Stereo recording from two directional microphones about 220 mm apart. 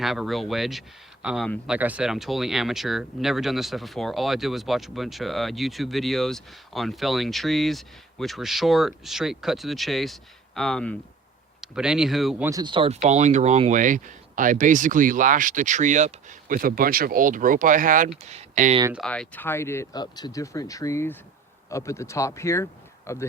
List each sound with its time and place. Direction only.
0.0 s speech: centre (ahead or behind)
12.5 s speech: 20° right (ahead or behind)
18.9 s speech: 5° left (ahead or behind)